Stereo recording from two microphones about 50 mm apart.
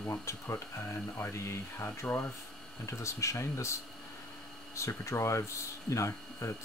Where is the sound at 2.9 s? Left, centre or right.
Left.